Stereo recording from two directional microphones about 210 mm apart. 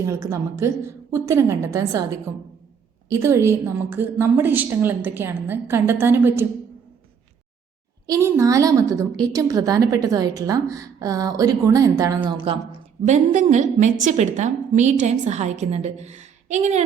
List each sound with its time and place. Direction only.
0.0 s a woman's voice: 15° right (ahead or behind)
3.1 s a woman's voice: 15° right (ahead or behind)
8.0 s a woman's voice: 15° right (ahead or behind)
13.1 s a woman's voice: 35° right (ahead or behind)